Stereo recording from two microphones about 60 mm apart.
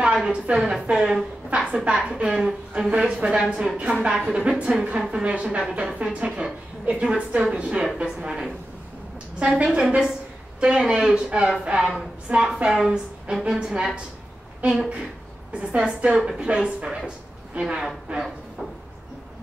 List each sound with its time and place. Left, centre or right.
0.0 s a woman's voice: centre
0.8 s a woman's voice: centre
12.6 s speech: centre
15.6 s a woman's voice: right